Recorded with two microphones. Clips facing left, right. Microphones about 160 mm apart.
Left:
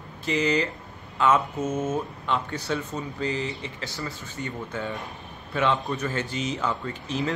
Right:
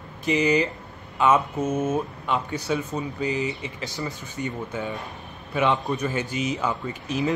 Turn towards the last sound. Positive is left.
turn(degrees=-15)  # may be behind; listen again after turning